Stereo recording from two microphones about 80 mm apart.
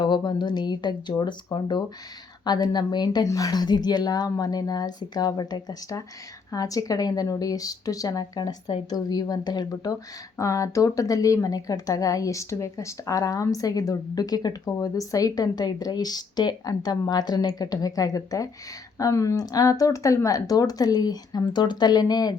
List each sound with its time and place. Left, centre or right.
0.0 s a woman's voice: left
3.2 s a woman's voice: left